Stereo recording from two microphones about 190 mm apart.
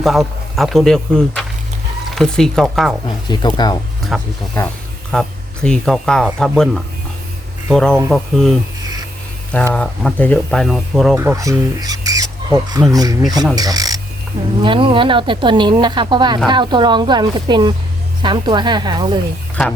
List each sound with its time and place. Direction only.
0.0 s speech: centre (ahead or behind)
3.2 s speech: 20° left (ahead or behind)
4.1 s speech: centre (ahead or behind)
7.7 s speech: centre (ahead or behind)
11.2 s speech: 15° right (ahead or behind)